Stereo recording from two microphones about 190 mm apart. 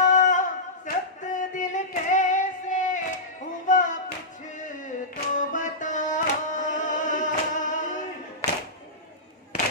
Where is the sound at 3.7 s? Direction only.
40° left (ahead or behind).